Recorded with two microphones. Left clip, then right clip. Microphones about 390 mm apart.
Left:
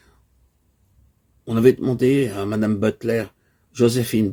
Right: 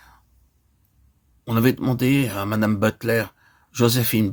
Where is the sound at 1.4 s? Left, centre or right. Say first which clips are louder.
Left 5 dB; right.